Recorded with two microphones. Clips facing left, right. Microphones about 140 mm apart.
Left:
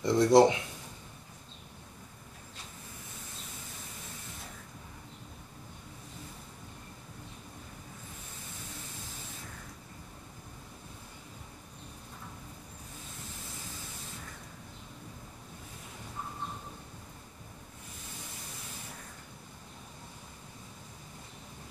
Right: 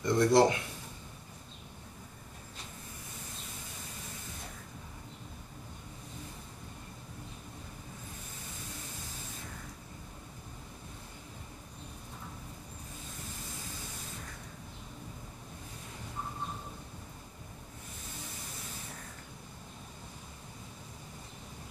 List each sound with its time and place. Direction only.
0.0 s speech: 20° left (ahead or behind)